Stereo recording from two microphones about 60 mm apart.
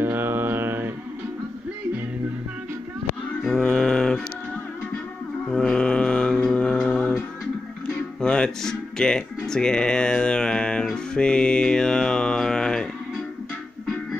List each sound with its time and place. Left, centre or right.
0.0 s mantra: right
3.4 s mantra: centre
5.5 s mantra: centre
8.2 s music: centre
11.1 s mantra: centre